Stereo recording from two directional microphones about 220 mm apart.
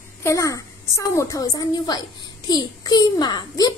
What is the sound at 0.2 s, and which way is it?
A woman's voice, 15° left (ahead or behind).